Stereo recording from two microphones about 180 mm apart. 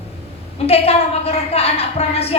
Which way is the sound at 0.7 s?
35° left (ahead or behind).